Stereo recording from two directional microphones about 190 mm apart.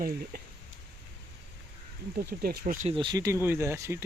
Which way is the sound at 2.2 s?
55° right (ahead or behind).